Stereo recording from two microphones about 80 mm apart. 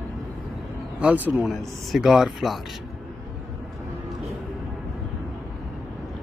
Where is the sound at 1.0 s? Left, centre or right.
Right.